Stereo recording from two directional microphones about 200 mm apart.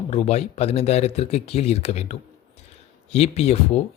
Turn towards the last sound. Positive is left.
turn(degrees=30)  # may be behind; listen again after turning